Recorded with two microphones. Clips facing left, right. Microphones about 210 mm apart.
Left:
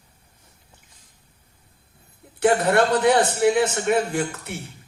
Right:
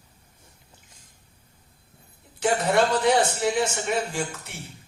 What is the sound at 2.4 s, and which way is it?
Speech, 60° left (ahead or behind).